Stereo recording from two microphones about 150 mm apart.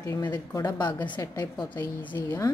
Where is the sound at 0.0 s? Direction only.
25° left (ahead or behind).